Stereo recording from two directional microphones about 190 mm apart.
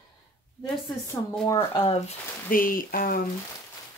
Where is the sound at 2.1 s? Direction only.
45° left (ahead or behind).